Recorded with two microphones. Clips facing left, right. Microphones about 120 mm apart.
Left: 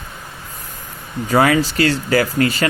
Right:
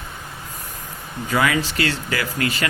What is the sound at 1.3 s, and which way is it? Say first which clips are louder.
Speech: left 6 dB; 35° left (ahead or behind).